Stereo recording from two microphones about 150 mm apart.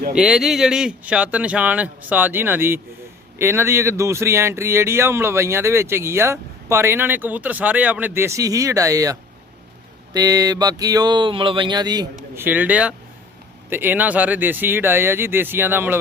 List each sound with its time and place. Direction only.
0.2 s speech: 5° right (ahead or behind); by 9.1 s 20° right (ahead or behind)
10.2 s speech: 25° right (ahead or behind)
12.4 s speech: 10° right (ahead or behind)